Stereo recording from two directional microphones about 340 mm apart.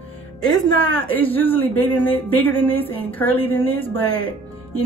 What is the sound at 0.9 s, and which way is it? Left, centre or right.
Speech, centre.